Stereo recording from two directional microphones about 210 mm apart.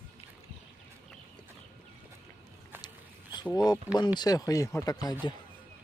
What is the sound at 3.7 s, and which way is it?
Speech, 20° left (ahead or behind).